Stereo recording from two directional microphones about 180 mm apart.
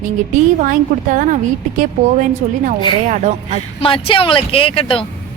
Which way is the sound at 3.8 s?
30° left (ahead or behind).